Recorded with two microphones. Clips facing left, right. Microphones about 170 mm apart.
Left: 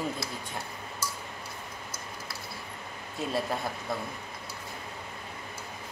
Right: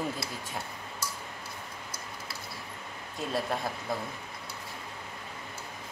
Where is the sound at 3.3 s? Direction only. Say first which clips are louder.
Even; centre (ahead or behind).